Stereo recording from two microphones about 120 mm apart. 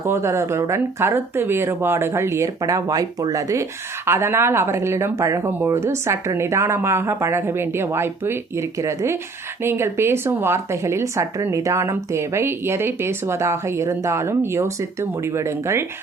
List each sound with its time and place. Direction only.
0.0 s speech: 20° right (ahead or behind)